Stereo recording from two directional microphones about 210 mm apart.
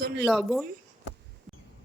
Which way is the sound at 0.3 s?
Centre (ahead or behind).